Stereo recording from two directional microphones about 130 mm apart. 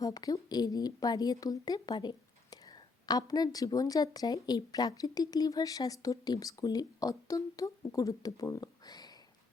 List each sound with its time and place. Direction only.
0.0 s speech: 30° left (ahead or behind)